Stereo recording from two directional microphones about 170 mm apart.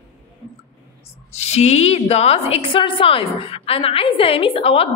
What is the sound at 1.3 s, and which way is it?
A woman's voice, 40° left (ahead or behind).